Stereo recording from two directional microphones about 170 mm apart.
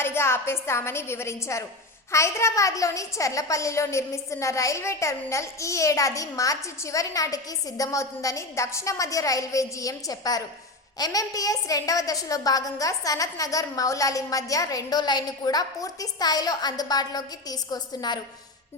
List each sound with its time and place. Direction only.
0.0 s a woman's voice: 15° left (ahead or behind)